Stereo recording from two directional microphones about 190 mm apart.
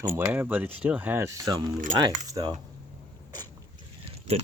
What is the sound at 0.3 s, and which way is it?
Speech, 10° right (ahead or behind).